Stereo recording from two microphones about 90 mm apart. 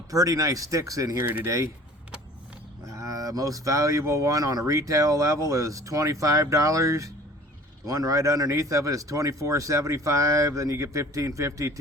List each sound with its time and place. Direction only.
0.1 s speech: 40° right (ahead or behind)
1.2 s speech: 20° right (ahead or behind)
1.5 s speech: 35° right (ahead or behind)
2.8 s speech: 35° right (ahead or behind)